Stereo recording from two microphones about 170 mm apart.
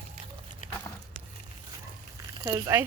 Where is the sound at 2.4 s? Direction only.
15° right (ahead or behind).